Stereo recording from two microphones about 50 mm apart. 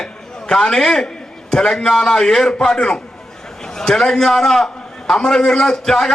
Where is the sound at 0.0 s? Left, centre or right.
Centre.